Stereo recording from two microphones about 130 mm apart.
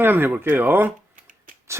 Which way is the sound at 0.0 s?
15° right (ahead or behind).